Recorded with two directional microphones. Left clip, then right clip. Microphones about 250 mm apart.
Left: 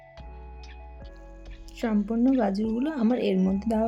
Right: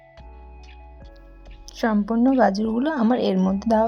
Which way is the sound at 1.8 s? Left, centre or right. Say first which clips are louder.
Right 5 dB; centre.